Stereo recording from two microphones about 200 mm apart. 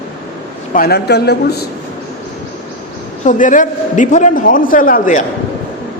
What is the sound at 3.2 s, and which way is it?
A man's voice, 40° left (ahead or behind).